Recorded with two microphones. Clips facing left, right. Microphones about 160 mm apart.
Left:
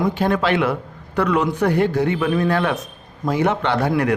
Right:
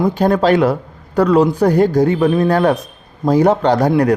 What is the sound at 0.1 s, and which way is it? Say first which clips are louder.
Speech: right 6 dB; 40° right (ahead or behind).